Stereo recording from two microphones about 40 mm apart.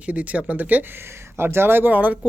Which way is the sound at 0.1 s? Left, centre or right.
Right.